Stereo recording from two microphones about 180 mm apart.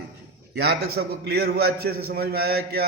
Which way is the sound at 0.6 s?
60° right (ahead or behind).